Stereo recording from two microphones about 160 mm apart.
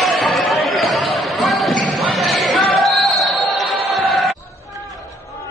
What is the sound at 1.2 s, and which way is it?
Basketball bounce, centre (ahead or behind).